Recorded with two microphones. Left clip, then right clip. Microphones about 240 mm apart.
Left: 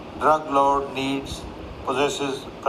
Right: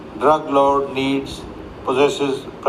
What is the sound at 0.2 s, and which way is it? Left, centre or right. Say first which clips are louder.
Speech: right 4 dB; right.